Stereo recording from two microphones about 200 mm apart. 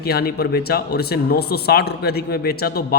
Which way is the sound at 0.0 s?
50° left (ahead or behind).